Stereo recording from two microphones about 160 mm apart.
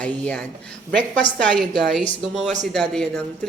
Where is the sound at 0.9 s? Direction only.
10° left (ahead or behind).